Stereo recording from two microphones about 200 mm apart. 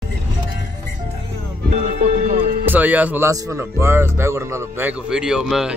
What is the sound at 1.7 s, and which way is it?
Music, 35° right (ahead or behind).